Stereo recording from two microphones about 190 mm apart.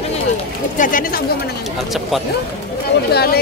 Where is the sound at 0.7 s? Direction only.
45° left (ahead or behind).